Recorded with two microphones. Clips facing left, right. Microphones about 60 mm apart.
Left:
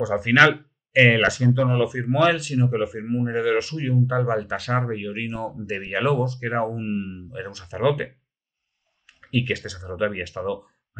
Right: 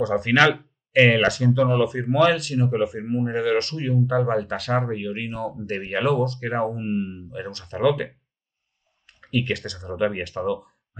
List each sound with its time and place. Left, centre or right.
0.0 s speech: centre